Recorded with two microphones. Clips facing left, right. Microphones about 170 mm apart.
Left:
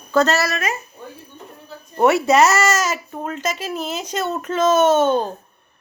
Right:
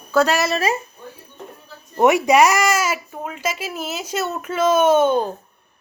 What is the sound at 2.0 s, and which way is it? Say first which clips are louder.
Speech: even; 15° right (ahead or behind).